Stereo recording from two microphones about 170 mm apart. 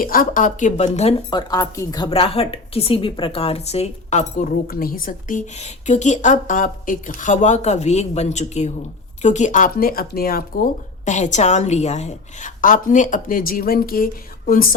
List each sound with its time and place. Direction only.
0.0 s speech: 55° left (ahead or behind)
1.3 s speech: 25° left (ahead or behind); by 4.4 s 45° left (ahead or behind)
4.7 s speech: 55° left (ahead or behind)